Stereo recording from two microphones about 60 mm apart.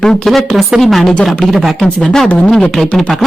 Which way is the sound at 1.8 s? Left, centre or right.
Centre.